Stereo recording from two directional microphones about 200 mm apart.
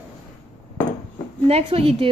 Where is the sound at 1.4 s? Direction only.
30° right (ahead or behind).